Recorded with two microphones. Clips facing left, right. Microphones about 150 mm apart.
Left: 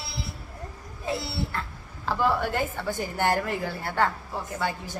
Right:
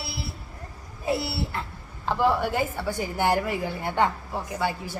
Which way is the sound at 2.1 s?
15° right (ahead or behind).